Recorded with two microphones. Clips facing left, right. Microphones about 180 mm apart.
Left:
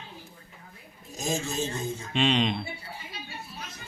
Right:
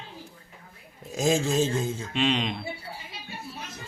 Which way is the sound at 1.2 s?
90° right.